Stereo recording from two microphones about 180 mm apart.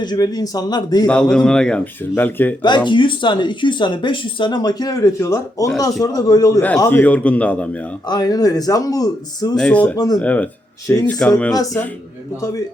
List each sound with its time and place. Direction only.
0.0 s speech: 20° left (ahead or behind)
1.0 s a man's voice: 5° left (ahead or behind)
2.6 s a man's voice: 25° left (ahead or behind); by 7.8 s 5° left (ahead or behind)
8.0 s speech: 20° left (ahead or behind)
9.6 s a man's voice: 5° left (ahead or behind)
12.4 s speech: 20° left (ahead or behind)